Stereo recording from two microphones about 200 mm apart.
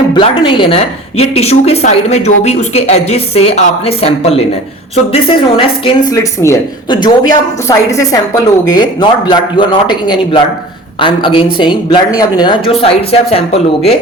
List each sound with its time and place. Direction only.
0.1 s a woman's voice: 25° left (ahead or behind)
6.1 s a woman's voice: 15° left (ahead or behind)